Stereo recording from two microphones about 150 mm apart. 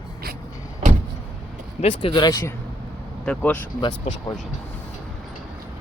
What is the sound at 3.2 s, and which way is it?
Speech, 10° left (ahead or behind).